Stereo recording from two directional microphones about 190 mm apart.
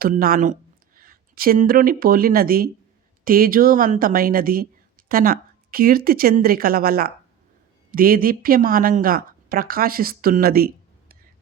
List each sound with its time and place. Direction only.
0.0 s speech: 50° right (ahead or behind)